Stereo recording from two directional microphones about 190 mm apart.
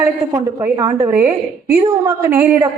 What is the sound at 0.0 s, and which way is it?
A woman's voice, 15° right (ahead or behind).